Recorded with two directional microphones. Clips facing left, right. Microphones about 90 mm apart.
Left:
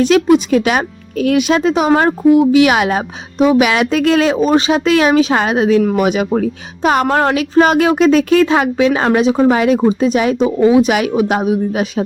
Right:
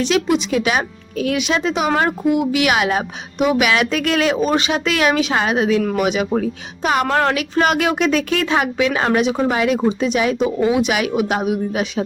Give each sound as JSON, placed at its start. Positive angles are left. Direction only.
{"t": 0.0, "sound": "a woman's voice", "side_deg": 40}